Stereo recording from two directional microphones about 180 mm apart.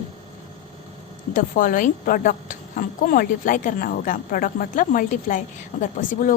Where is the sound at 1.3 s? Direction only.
50° left (ahead or behind).